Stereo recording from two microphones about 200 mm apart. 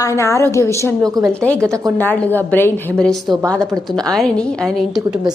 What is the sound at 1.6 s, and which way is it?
Speech, 15° right (ahead or behind).